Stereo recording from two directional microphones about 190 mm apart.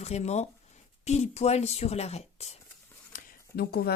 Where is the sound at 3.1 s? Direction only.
50° left (ahead or behind).